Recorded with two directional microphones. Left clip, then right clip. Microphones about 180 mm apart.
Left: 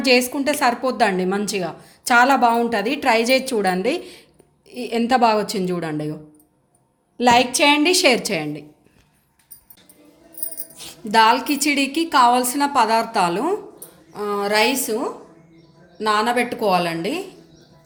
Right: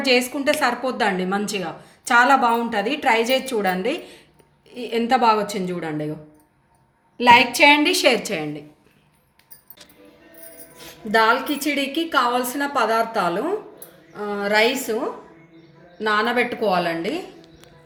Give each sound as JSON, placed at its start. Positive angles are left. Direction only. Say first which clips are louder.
{"t": 0.0, "sound": "a woman's voice", "louder": "left 2 dB", "side_deg": 50}
{"t": 7.2, "sound": "a woman's voice", "louder": "right 2 dB", "side_deg": 40}
{"t": 10.8, "sound": "a woman's voice", "louder": "left 3 dB", "side_deg": 55}
{"t": 16.0, "sound": "a woman's voice", "louder": "left 1 dB", "side_deg": 45}